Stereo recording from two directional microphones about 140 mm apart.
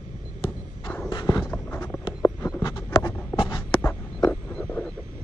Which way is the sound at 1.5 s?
15° left (ahead or behind).